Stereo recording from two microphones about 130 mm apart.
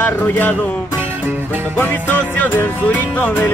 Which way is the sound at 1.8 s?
15° left (ahead or behind).